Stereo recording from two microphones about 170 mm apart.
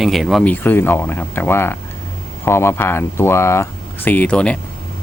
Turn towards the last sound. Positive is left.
turn(degrees=5)  # may be behind; listen again after turning